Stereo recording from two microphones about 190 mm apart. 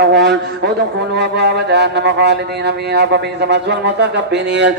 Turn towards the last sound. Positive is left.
turn(degrees=-65)  # may be behind; listen again after turning